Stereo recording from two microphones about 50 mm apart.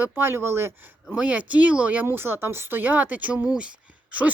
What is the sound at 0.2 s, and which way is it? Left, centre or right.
Speech, right.